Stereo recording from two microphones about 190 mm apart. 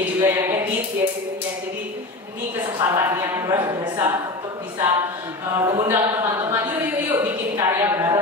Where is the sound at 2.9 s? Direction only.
15° right (ahead or behind).